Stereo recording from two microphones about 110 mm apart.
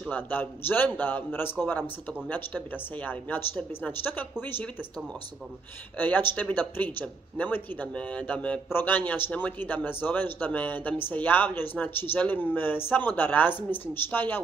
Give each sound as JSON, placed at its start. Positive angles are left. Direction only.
{"t": 0.1, "sound": "speech", "side_deg": 15}
{"t": 5.9, "sound": "speech", "side_deg": 15}